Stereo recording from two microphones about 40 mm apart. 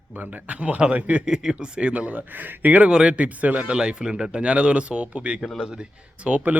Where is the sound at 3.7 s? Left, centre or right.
Centre.